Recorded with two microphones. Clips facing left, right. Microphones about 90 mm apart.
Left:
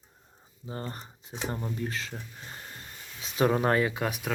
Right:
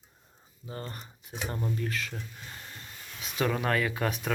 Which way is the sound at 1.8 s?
25° left (ahead or behind).